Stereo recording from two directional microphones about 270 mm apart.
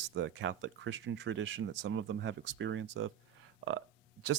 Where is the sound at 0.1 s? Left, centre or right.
Right.